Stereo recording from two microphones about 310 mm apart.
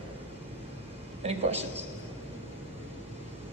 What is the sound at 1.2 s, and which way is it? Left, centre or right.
Speech, centre.